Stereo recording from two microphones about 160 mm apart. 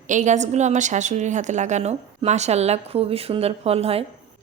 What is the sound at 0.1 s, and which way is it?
A woman's voice, 50° right (ahead or behind).